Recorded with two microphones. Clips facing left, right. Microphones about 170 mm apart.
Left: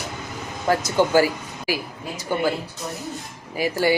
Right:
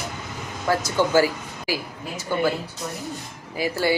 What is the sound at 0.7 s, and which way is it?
Speech, 15° left (ahead or behind).